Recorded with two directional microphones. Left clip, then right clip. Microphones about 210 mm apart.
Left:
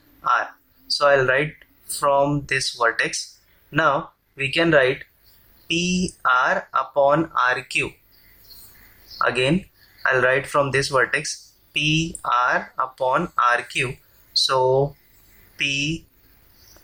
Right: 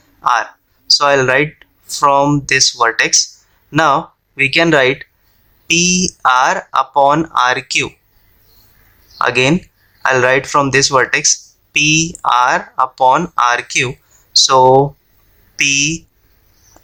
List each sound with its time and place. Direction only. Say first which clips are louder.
0.2 s speech: right 7 dB; 45° right (ahead or behind)
9.1 s speech: right 7 dB; 45° right (ahead or behind)